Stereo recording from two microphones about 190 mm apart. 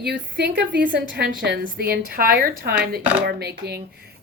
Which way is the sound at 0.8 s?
50° right (ahead or behind).